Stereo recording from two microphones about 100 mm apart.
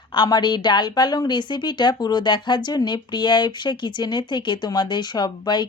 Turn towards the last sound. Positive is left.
turn(degrees=45)  # may be behind; listen again after turning